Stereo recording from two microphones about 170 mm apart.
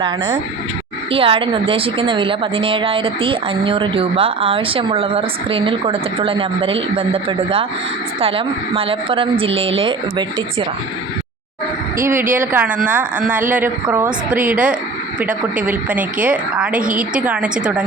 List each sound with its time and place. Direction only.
1.1 s a woman's voice: 35° right (ahead or behind)
11.9 s a woman's voice: 15° right (ahead or behind)